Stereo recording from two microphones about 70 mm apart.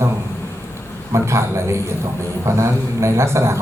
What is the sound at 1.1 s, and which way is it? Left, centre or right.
Speech, right.